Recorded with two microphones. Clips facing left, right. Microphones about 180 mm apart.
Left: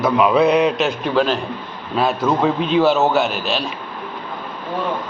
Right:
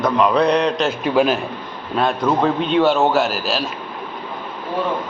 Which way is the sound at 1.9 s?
5° left (ahead or behind).